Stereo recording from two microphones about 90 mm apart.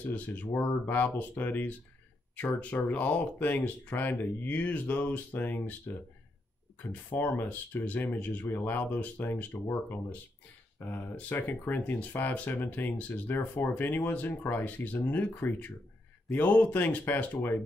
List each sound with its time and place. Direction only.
0.1 s speech: 20° left (ahead or behind)
6.9 s speech: 20° left (ahead or behind)
10.8 s speech: 20° left (ahead or behind)